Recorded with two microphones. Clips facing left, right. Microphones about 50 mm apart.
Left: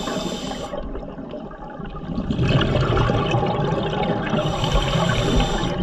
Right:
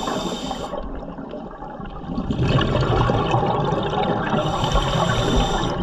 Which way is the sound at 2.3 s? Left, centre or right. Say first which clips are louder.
Even; left.